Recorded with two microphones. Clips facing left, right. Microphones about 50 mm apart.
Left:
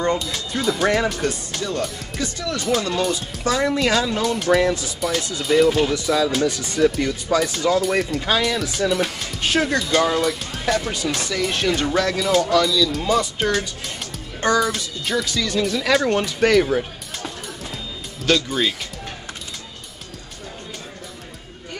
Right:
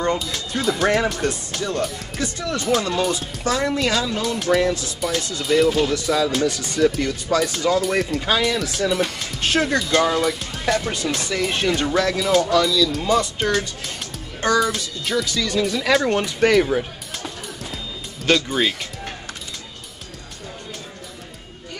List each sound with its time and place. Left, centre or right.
0.0 s speech: centre
2.9 s speech: centre
10.0 s music: centre
10.8 s speech: centre
11.2 s speech: centre
14.6 s speech: centre
18.5 s speech: centre